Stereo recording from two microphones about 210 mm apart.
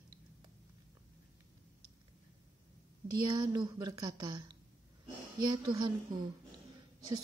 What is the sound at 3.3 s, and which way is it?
Speech, 20° right (ahead or behind).